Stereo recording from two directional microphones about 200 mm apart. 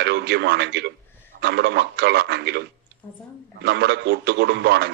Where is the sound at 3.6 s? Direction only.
60° right (ahead or behind).